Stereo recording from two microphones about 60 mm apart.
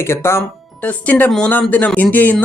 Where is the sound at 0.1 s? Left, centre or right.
Left.